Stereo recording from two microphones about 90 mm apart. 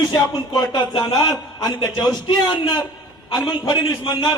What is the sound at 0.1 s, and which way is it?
A man's voice, 50° left (ahead or behind).